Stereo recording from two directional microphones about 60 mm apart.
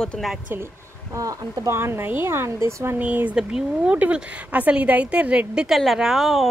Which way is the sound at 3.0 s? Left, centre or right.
Right.